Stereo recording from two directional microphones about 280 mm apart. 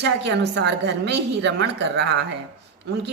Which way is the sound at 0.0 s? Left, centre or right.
Right.